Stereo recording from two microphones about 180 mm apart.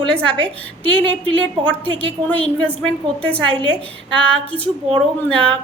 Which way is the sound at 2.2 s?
10° left (ahead or behind).